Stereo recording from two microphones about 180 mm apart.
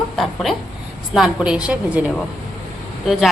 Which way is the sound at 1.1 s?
5° right (ahead or behind).